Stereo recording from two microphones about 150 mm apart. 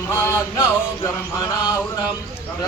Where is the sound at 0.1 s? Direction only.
20° left (ahead or behind).